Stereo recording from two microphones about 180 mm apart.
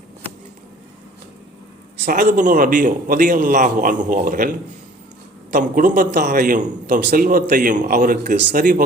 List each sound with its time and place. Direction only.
2.0 s a man's voice: 50° right (ahead or behind)